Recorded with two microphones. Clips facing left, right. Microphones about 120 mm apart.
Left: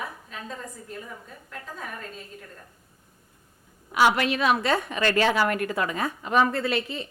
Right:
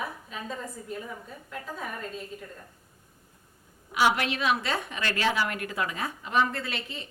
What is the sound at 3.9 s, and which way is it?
A woman's voice, 45° left (ahead or behind).